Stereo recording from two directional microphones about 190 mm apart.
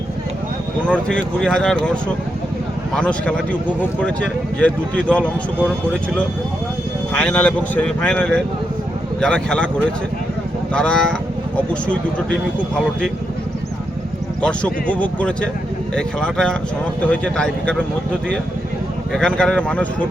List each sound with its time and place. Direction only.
0.9 s speech: 5° left (ahead or behind)
2.9 s speech: 5° left (ahead or behind)
14.4 s speech: 5° left (ahead or behind)
19.1 s speech: 5° left (ahead or behind)